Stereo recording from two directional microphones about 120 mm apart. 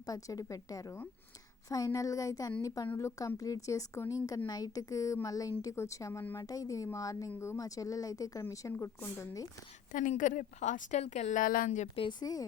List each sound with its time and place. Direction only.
0.0 s a woman's voice: 30° left (ahead or behind)
9.9 s a woman's voice: 90° left
12.2 s speech: 30° left (ahead or behind)